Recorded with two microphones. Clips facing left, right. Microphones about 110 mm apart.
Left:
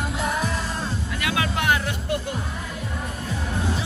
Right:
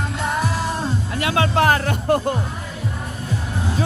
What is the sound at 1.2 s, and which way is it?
Music, 35° right (ahead or behind).